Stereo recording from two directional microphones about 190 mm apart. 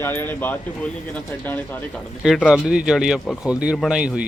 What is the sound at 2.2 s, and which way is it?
Speech, centre (ahead or behind).